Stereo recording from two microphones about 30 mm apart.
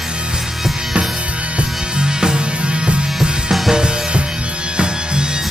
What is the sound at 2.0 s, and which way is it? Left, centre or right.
Music, right.